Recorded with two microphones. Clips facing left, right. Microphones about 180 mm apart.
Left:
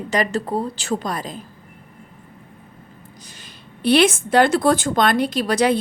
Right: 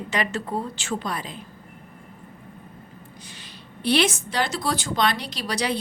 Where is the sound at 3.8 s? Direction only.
55° left (ahead or behind).